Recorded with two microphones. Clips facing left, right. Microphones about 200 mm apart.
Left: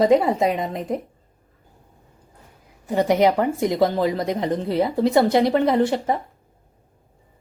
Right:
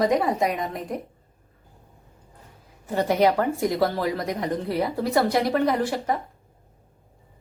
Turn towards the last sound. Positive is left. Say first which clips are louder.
# left 5 dB
turn(degrees=25)  # may be behind; listen again after turning